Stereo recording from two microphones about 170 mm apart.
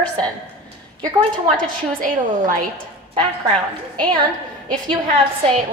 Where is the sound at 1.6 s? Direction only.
55° right (ahead or behind).